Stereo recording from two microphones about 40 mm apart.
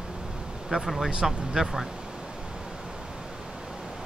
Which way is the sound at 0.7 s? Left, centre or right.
Centre.